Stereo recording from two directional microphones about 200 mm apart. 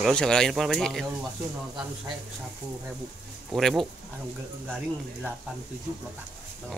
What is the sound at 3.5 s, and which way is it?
Speech, centre (ahead or behind).